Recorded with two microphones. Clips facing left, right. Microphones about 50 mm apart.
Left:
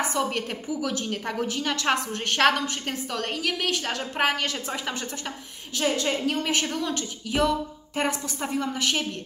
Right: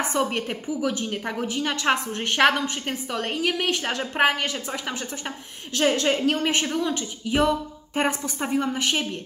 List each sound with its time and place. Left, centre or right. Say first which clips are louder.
0.2 s a woman's voice: right 4 dB; right
0.5 s a woman's voice: right 3 dB; centre
4.6 s a woman's voice: even; centre
5.8 s a woman's voice: right 4 dB; right
6.5 s a woman's voice: right 2 dB; right